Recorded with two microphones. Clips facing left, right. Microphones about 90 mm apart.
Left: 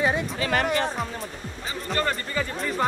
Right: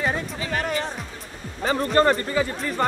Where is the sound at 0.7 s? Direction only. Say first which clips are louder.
Left 3 dB; 50° left (ahead or behind).